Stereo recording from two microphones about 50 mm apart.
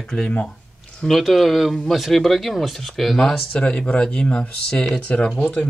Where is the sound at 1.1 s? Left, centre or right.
Centre.